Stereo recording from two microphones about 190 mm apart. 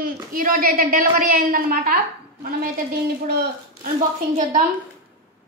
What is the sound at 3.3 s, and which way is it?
Speech, 55° right (ahead or behind).